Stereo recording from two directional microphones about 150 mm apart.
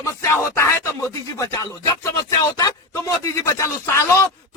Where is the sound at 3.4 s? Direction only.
20° left (ahead or behind).